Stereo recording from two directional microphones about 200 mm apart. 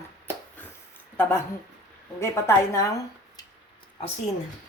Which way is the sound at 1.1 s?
10° left (ahead or behind).